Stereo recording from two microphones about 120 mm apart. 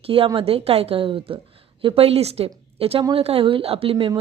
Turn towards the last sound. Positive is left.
turn(degrees=-50)  # may be behind; listen again after turning